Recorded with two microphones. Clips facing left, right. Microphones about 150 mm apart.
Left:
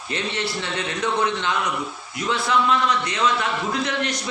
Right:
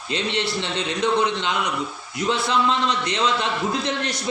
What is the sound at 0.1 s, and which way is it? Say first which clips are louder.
A man's voice: right 2 dB; 20° right (ahead or behind).